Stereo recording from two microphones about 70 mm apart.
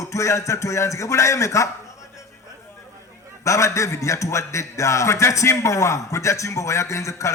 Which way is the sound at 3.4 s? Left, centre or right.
Left.